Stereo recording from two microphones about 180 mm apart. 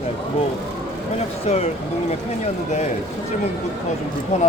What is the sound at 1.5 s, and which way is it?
Speech, 40° left (ahead or behind).